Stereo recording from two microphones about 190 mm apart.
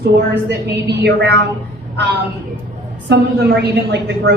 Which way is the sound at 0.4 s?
60° right (ahead or behind).